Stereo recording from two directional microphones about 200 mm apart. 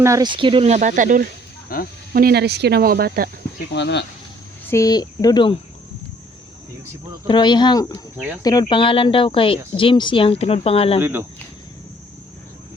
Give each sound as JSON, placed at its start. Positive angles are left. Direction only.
{"t": 0.0, "sound": "speech", "side_deg": -15}
{"t": 3.7, "sound": "speech", "side_deg": 60}
{"t": 4.7, "sound": "speech", "side_deg": 20}
{"t": 7.3, "sound": "speech", "side_deg": 20}
{"t": 11.0, "sound": "speech", "side_deg": -10}